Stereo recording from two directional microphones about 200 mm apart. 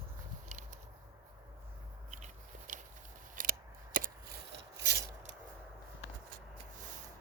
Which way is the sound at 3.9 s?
45° right (ahead or behind).